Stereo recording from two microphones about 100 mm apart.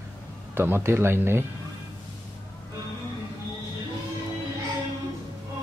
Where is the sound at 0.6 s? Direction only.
20° right (ahead or behind).